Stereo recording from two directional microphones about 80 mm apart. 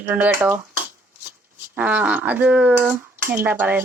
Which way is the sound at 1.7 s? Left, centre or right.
Right.